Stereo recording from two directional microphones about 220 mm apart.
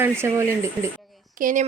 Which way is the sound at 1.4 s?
35° right (ahead or behind).